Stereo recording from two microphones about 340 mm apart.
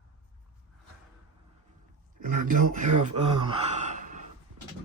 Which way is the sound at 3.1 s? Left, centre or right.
Centre.